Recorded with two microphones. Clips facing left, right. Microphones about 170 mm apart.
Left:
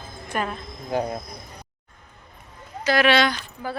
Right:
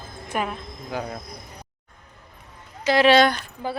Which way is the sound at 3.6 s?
25° right (ahead or behind).